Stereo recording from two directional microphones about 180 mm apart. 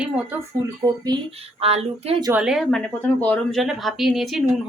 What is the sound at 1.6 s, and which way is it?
Speech, 35° right (ahead or behind).